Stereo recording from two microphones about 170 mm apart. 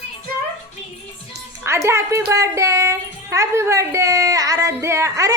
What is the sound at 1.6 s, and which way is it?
A woman's voice, 15° right (ahead or behind).